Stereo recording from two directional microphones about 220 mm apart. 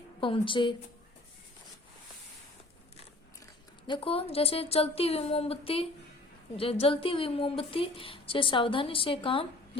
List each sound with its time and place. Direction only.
0.2 s a woman's voice: 25° left (ahead or behind)
3.8 s a woman's voice: 25° left (ahead or behind)